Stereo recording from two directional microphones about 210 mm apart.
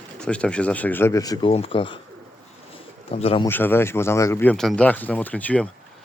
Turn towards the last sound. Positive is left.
turn(degrees=5)  # may be behind; listen again after turning